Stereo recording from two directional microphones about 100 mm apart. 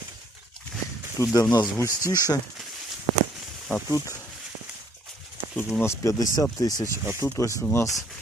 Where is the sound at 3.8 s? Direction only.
35° left (ahead or behind).